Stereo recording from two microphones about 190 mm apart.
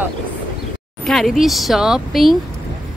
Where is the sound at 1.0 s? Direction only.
Centre (ahead or behind).